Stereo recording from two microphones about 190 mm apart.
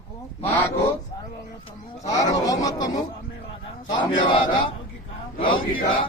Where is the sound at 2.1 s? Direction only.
20° left (ahead or behind).